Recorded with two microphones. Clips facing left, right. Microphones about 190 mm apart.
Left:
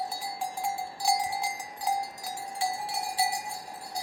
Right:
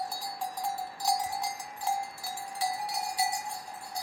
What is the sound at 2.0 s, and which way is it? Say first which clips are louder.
Cowbell: left 2 dB; 40° left (ahead or behind).